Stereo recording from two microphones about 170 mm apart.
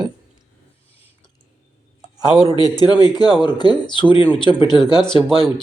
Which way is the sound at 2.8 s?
25° left (ahead or behind).